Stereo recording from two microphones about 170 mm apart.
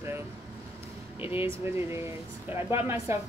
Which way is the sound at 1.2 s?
10° right (ahead or behind).